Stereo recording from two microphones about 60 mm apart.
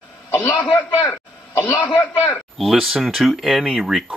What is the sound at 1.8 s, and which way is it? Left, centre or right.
Speech, left.